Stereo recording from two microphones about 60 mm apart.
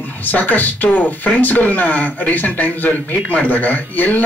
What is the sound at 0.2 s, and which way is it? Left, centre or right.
Speech, left.